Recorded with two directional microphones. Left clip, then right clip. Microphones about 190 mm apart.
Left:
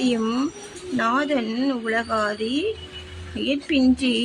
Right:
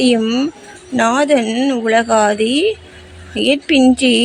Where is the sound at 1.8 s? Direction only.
30° right (ahead or behind).